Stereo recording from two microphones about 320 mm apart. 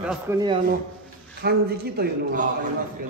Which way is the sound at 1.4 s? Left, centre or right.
Right.